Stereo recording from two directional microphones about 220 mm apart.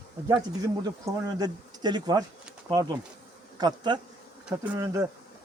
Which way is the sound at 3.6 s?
20° right (ahead or behind).